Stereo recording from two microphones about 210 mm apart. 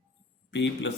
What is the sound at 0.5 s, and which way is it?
Speech, 60° left (ahead or behind).